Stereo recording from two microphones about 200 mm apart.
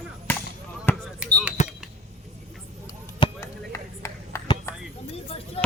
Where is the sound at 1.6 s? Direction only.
35° left (ahead or behind).